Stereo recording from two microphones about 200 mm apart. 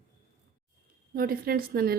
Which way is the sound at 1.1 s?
45° right (ahead or behind).